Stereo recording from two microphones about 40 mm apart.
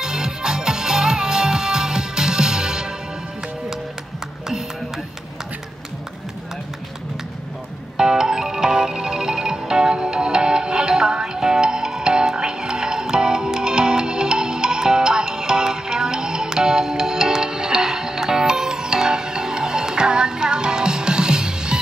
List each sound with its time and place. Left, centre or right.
0.0 s music: centre
8.0 s music: centre